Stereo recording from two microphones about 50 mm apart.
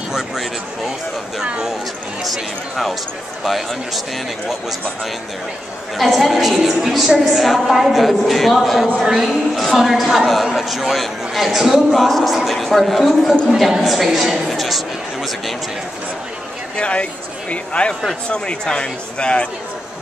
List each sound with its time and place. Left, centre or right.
0.1 s speech: centre
2.2 s a woman's voice: centre
5.9 s a woman's voice: centre
16.7 s speech: left